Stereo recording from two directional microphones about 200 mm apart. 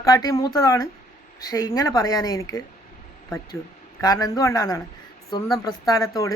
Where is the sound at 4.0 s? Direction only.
20° left (ahead or behind).